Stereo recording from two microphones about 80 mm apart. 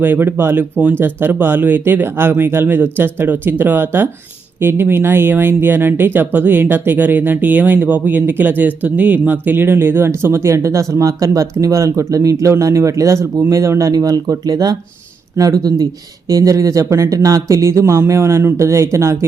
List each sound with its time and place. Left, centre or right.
0.0 s speech: right